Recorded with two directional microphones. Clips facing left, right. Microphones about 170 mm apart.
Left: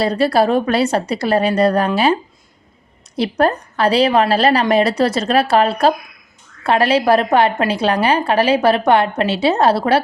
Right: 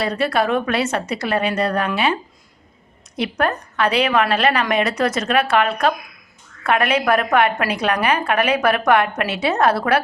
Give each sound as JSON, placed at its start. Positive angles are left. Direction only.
{"t": 0.0, "sound": "a woman's voice", "side_deg": 35}
{"t": 3.2, "sound": "a woman's voice", "side_deg": 30}